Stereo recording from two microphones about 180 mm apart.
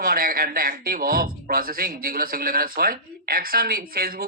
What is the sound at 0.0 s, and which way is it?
Speech, 55° right (ahead or behind).